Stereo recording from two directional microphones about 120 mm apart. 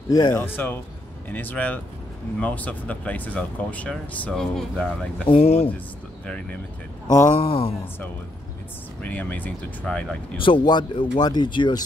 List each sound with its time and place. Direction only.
0.1 s speech: 35° left (ahead or behind)
0.4 s speech: 15° left (ahead or behind)
5.3 s speech: 55° left (ahead or behind)
6.2 s speech: 10° left (ahead or behind)
7.3 s speech: 50° left (ahead or behind)
9.0 s speech: 15° left (ahead or behind)
10.3 s speech: 45° left (ahead or behind)